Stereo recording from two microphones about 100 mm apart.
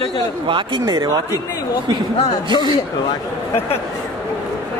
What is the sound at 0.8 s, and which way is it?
Speech, 40° right (ahead or behind).